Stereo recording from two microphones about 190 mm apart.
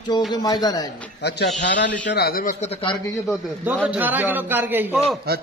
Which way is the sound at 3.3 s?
5° right (ahead or behind).